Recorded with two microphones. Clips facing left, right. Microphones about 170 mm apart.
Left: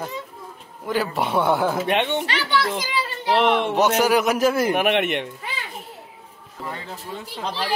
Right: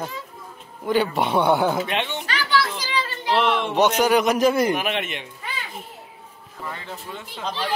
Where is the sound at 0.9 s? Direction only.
Centre (ahead or behind).